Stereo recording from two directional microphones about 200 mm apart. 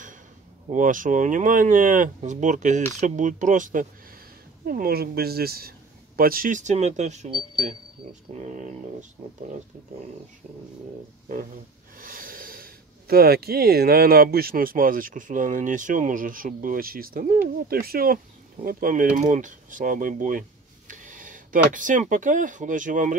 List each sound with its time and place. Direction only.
0.7 s speech: 40° right (ahead or behind)
8.4 s speech: 40° right (ahead or behind)
12.0 s speech: 45° right (ahead or behind)